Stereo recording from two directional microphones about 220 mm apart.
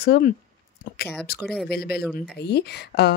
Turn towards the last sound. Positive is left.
turn(degrees=45)  # may be behind; listen again after turning